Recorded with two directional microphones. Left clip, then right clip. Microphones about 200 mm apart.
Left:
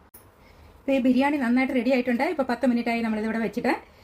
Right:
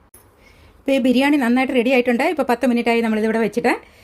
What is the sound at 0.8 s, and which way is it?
Speech, 50° right (ahead or behind).